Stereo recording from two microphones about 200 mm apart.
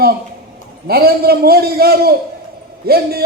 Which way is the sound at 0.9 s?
50° right (ahead or behind).